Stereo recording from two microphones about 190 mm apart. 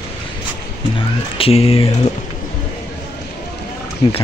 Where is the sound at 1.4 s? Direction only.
30° left (ahead or behind).